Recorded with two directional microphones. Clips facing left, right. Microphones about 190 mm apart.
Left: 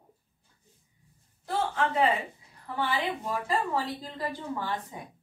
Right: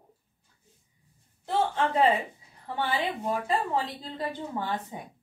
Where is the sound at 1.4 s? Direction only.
25° right (ahead or behind).